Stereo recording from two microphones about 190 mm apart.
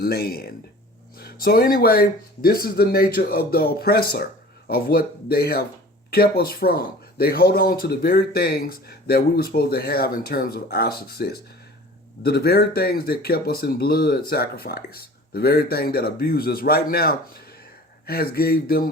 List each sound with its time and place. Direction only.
0.0 s speech: 55° left (ahead or behind)